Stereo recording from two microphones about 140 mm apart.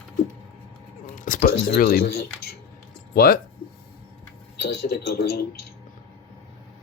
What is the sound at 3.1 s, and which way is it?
Speech, 90° left.